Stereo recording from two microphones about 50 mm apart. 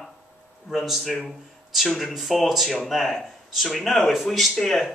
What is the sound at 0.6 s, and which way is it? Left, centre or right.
Speech, centre.